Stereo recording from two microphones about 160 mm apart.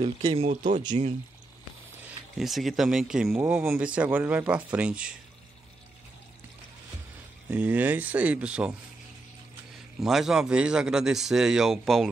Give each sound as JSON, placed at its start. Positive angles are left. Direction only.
{"t": 0.3, "sound": "speech", "side_deg": -45}
{"t": 2.3, "sound": "speech", "side_deg": 0}
{"t": 7.4, "sound": "speech", "side_deg": -10}
{"t": 9.9, "sound": "speech", "side_deg": 0}